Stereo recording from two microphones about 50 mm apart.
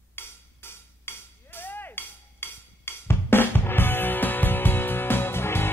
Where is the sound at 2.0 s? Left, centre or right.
Left.